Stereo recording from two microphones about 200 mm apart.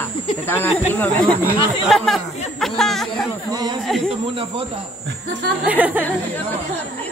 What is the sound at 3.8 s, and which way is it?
Speech, centre (ahead or behind).